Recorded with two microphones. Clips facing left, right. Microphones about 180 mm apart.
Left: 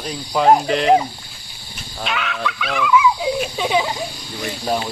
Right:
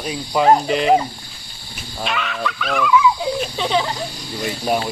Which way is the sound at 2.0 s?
Centre (ahead or behind).